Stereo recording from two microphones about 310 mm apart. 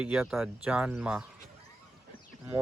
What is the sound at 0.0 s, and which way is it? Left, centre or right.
Speech, centre.